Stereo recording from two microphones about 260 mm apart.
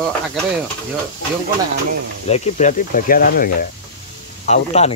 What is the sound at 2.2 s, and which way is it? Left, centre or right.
Speech, left.